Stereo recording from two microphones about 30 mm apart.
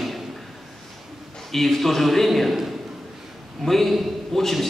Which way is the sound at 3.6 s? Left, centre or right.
Centre.